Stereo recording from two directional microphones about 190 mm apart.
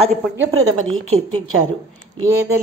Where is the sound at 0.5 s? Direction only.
90° right.